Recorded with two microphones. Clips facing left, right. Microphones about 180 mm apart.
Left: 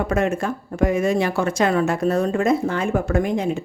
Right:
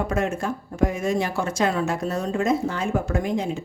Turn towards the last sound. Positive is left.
turn(degrees=60)  # may be behind; listen again after turning